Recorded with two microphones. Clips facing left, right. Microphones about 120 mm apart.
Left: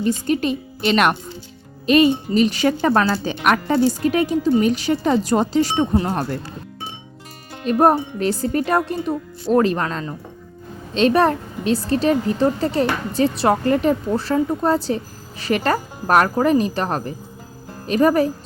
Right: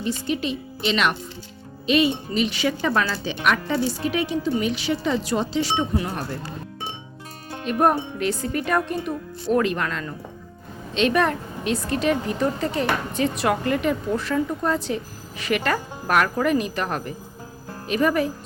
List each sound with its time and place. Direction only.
0.0 s speech: 45° left (ahead or behind)
7.6 s a woman's voice: 35° left (ahead or behind)